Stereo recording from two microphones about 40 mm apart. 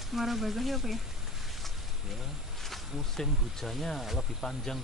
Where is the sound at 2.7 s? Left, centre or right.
Centre.